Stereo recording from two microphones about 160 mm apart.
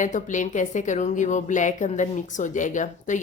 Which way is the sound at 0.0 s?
50° left (ahead or behind).